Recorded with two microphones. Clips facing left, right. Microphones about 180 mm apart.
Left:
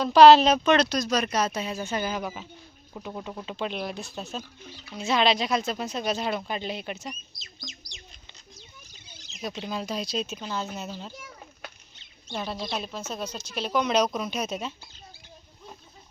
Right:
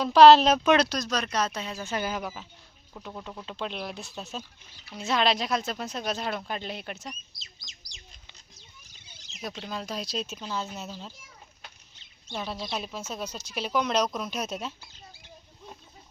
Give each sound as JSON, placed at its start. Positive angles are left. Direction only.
{"t": 0.0, "sound": "speech", "side_deg": 0}
{"t": 1.9, "sound": "speech", "side_deg": 0}
{"t": 2.9, "sound": "speech", "side_deg": 15}
{"t": 9.6, "sound": "speech", "side_deg": 0}
{"t": 11.1, "sound": "children playing", "side_deg": 65}
{"t": 12.3, "sound": "speech", "side_deg": 0}